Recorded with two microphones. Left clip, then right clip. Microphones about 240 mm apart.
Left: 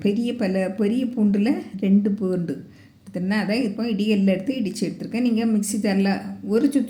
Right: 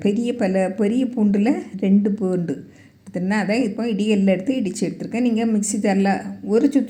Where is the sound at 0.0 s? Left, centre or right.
Centre.